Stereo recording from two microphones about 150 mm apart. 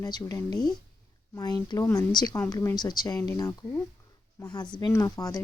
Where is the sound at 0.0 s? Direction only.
20° left (ahead or behind).